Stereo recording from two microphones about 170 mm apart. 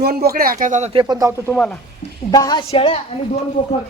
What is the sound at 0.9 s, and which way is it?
Speech, 25° right (ahead or behind).